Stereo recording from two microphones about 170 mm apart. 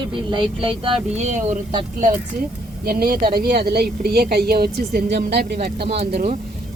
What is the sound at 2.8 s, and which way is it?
A woman's voice, 60° right (ahead or behind).